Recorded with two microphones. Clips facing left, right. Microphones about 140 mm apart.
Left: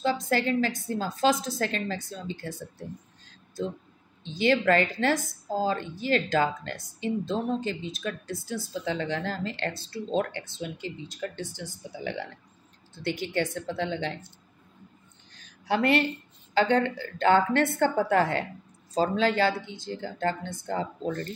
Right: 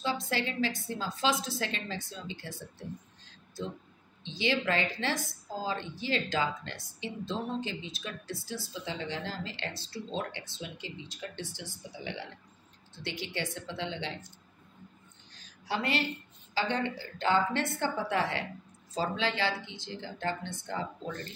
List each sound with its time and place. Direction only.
0.0 s speech: 50° left (ahead or behind)
4.2 s speech: 50° left (ahead or behind)
15.6 s a woman's voice: 55° left (ahead or behind)